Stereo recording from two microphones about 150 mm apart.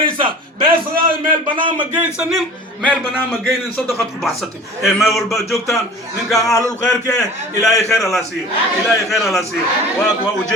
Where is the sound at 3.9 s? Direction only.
Centre (ahead or behind).